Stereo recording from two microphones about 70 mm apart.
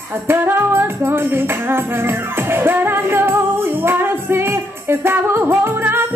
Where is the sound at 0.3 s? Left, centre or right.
Right.